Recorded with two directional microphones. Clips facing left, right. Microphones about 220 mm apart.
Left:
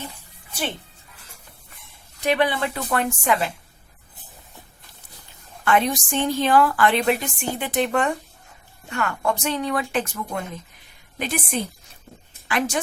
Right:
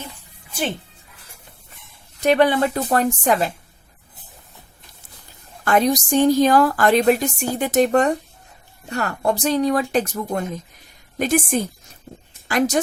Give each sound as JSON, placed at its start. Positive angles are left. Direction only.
{"t": 2.2, "sound": "speech", "side_deg": -45}
{"t": 5.6, "sound": "a woman's voice", "side_deg": -40}